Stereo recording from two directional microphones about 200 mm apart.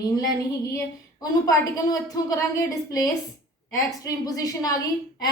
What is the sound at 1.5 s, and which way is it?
A woman's voice, 15° left (ahead or behind).